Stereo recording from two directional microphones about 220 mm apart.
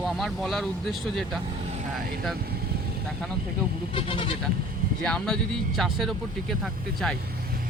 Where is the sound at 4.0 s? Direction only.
25° left (ahead or behind).